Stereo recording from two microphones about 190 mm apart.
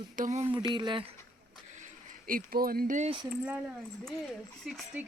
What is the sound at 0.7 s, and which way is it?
Speech, 25° right (ahead or behind).